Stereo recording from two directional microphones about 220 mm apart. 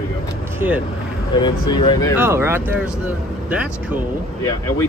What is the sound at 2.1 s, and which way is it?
Speech, 10° right (ahead or behind).